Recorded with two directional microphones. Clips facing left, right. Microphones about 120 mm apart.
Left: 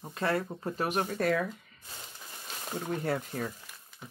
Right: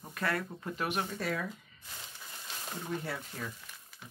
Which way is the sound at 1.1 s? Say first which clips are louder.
Left 7 dB; 60° left (ahead or behind).